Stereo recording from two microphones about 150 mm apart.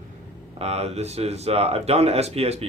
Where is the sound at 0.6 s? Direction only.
45° right (ahead or behind).